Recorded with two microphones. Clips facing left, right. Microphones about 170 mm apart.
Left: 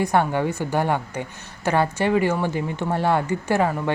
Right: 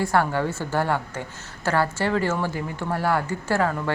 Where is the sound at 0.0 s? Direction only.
20° left (ahead or behind).